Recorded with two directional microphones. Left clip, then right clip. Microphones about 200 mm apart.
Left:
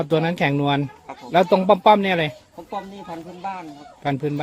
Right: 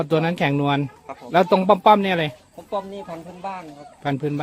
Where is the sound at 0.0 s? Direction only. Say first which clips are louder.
Even; 5° right (ahead or behind).